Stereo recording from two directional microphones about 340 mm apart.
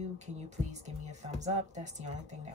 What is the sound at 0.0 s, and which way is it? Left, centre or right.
Speech, centre.